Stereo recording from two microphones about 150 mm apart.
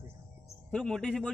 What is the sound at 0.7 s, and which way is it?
Speech, 5° left (ahead or behind).